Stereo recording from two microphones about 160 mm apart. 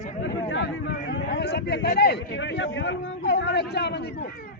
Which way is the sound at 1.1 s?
90° left.